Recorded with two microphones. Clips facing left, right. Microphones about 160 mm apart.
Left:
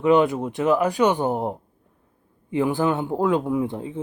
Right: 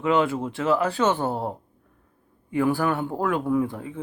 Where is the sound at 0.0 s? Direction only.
20° left (ahead or behind).